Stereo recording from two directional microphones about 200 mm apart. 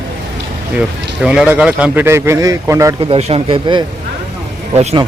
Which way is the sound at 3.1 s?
30° right (ahead or behind).